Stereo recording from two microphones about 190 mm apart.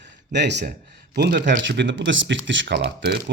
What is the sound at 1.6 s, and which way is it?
Speech, 70° right (ahead or behind).